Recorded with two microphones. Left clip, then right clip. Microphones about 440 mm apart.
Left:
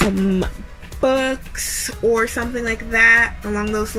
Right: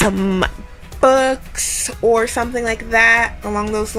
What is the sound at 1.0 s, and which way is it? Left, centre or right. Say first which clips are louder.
Speech: right 5 dB; centre.